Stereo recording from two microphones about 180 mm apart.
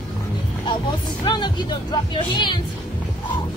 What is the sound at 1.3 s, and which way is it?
Speech, 25° left (ahead or behind).